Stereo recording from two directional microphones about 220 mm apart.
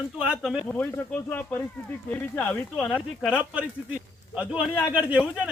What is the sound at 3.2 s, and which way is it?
Speech, 5° right (ahead or behind).